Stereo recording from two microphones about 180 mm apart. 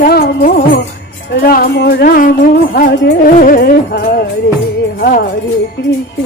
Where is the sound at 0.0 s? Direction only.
55° left (ahead or behind).